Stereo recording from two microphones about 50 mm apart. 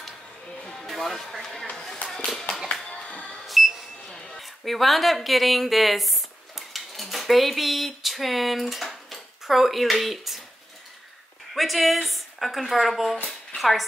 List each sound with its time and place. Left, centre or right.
0.7 s speech: centre
1.8 s a sound: centre
3.0 s music: left
3.4 s beep: centre
4.2 s a woman's voice: centre
11.5 s speech: centre